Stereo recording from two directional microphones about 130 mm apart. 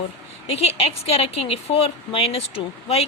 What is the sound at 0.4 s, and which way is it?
A woman's voice, 50° left (ahead or behind).